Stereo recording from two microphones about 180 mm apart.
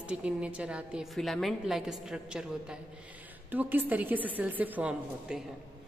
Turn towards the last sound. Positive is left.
turn(degrees=-10)  # may be behind; listen again after turning